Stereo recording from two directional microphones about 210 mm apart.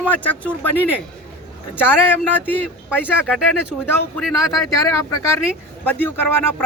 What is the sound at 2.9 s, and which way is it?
Speech, 10° left (ahead or behind).